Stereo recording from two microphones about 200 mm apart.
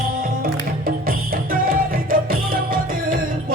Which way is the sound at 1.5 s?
45° right (ahead or behind).